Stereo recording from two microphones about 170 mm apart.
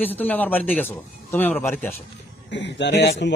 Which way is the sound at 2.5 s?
90° left.